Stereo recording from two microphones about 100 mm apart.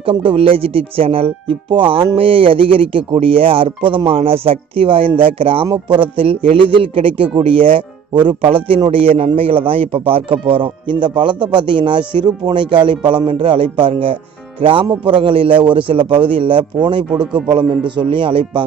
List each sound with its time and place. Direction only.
0.0 s a man's voice: 60° right (ahead or behind)